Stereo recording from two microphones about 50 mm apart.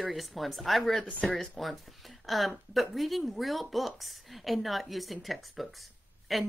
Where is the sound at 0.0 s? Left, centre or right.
Centre.